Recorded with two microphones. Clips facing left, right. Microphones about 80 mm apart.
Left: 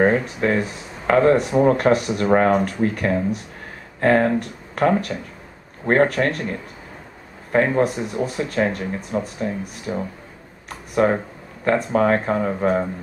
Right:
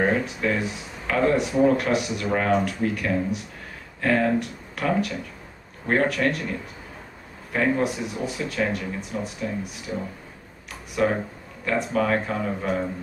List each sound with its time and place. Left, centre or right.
0.0 s speech: left
7.5 s speech: left